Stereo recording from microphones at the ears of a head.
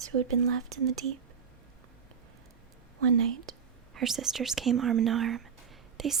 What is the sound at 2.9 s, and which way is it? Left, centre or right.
Speech, right.